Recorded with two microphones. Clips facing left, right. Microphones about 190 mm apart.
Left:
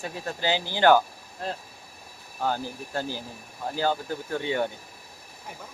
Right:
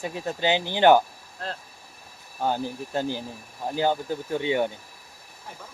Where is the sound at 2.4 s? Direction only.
15° right (ahead or behind).